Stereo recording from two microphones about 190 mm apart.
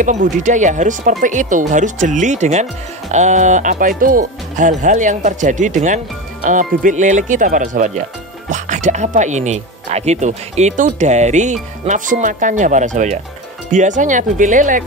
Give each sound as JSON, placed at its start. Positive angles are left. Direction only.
{"t": 0.0, "sound": "speech", "side_deg": -40}